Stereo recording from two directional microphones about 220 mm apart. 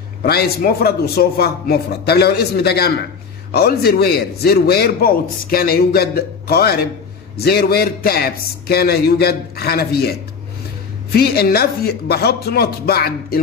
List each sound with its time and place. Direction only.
0.2 s a man's voice: 45° left (ahead or behind)